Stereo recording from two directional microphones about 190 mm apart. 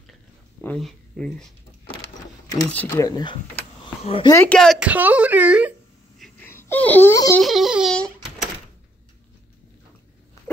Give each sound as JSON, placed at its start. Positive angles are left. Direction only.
{"t": 0.6, "sound": "speech", "side_deg": 5}
{"t": 2.6, "sound": "speech", "side_deg": 10}
{"t": 4.3, "sound": "speech", "side_deg": 10}
{"t": 6.4, "sound": "speech", "side_deg": 10}
{"t": 7.3, "sound": "a sound", "side_deg": 0}
{"t": 10.4, "sound": "dog", "side_deg": 15}